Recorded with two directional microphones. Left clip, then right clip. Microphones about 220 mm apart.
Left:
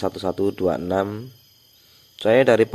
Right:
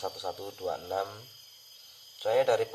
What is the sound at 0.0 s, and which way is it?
Speech, 40° left (ahead or behind).